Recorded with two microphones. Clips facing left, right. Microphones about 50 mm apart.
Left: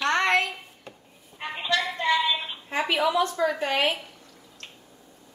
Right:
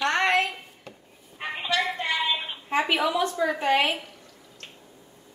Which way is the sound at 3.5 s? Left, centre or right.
Right.